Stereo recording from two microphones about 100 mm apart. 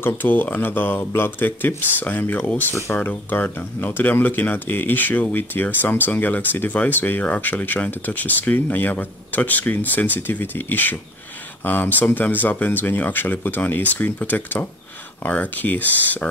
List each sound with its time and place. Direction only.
0.0 s speech: 20° left (ahead or behind)